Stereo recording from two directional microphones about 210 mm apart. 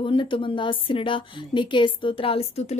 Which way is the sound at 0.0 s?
25° left (ahead or behind).